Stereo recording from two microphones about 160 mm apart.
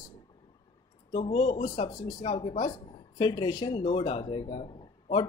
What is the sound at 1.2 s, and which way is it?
A man's voice, 35° left (ahead or behind).